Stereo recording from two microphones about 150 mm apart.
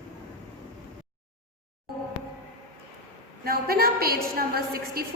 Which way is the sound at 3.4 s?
90° right.